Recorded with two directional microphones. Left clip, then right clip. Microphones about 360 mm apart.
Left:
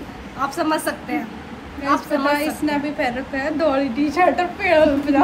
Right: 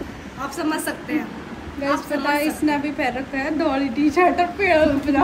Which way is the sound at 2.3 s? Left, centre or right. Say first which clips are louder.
Right 1 dB; centre.